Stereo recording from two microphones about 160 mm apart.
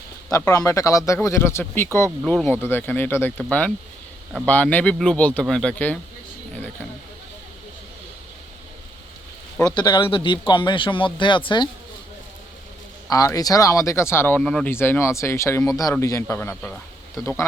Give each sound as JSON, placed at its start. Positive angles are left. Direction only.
{"t": 0.5, "sound": "speech", "side_deg": 20}
{"t": 9.6, "sound": "speech", "side_deg": 25}
{"t": 13.1, "sound": "speech", "side_deg": 20}